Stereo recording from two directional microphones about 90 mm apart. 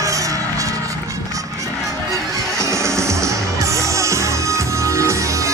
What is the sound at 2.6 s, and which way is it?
Music, 30° right (ahead or behind).